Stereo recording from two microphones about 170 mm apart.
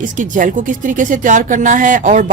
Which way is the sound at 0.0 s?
50° right (ahead or behind).